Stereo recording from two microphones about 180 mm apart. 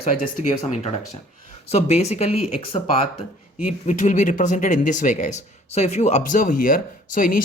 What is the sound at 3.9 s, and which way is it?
Speech, 40° left (ahead or behind).